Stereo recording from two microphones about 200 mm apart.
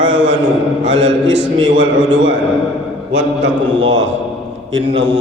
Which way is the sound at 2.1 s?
65° right (ahead or behind).